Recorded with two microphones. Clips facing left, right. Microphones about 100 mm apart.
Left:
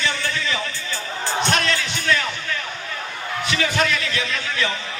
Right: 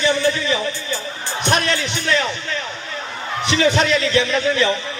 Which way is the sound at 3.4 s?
25° right (ahead or behind).